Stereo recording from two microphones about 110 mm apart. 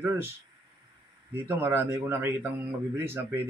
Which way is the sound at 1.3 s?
20° right (ahead or behind).